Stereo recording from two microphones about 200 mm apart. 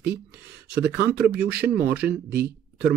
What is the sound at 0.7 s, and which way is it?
Speech, 10° right (ahead or behind).